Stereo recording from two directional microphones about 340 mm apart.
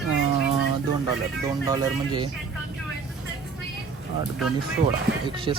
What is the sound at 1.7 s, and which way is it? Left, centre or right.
Speech, centre.